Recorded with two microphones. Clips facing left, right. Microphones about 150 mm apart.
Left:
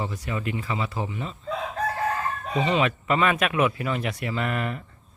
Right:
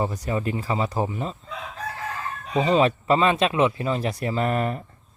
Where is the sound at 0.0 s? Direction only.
40° right (ahead or behind).